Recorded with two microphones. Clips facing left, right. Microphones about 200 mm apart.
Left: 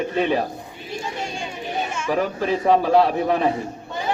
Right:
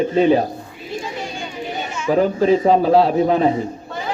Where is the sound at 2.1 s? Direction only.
25° right (ahead or behind).